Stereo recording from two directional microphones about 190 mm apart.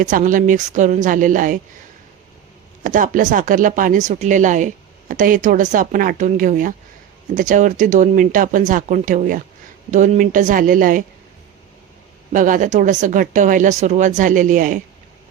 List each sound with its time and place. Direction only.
0.0 s speech: 45° right (ahead or behind)
2.8 s speech: 45° right (ahead or behind)
12.3 s speech: 45° right (ahead or behind)